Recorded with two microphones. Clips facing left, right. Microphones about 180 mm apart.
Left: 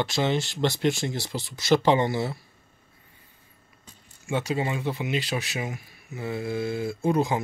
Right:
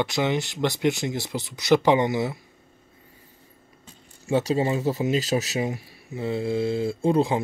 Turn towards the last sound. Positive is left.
turn(degrees=-30)  # may be behind; listen again after turning